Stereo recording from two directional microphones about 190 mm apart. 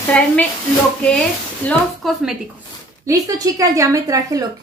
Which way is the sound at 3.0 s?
20° right (ahead or behind).